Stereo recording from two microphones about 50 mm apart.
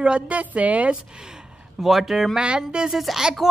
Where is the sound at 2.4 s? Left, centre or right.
Right.